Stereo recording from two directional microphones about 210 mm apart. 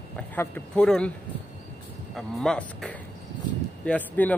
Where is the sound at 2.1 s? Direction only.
Centre (ahead or behind).